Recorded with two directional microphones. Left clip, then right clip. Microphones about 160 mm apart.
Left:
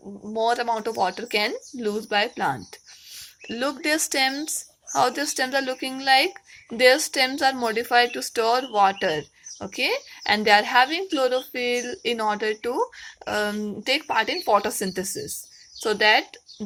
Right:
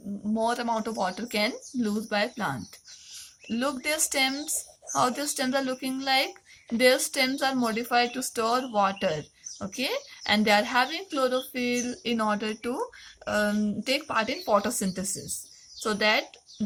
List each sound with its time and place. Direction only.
0.3 s speech: 30° left (ahead or behind)